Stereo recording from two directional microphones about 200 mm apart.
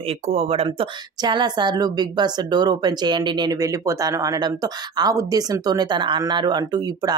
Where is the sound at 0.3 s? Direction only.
30° right (ahead or behind).